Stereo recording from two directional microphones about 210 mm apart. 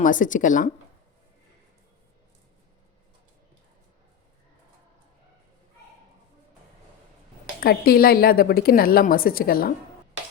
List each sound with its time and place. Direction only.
0.0 s speech: 40° left (ahead or behind)
7.6 s a woman's voice: 45° left (ahead or behind)